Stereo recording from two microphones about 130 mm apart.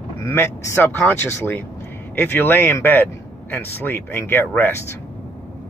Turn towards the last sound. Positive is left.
turn(degrees=15)  # may be behind; listen again after turning